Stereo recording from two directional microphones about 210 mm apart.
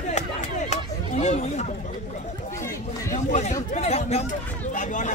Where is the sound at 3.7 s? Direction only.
30° left (ahead or behind).